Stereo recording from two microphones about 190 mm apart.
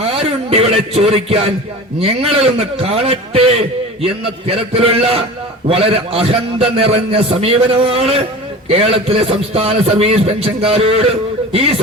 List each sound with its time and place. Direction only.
0.0 s a man's voice: 30° right (ahead or behind)